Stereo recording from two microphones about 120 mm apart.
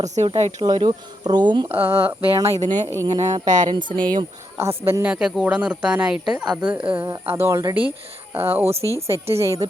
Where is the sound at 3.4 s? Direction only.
90° right.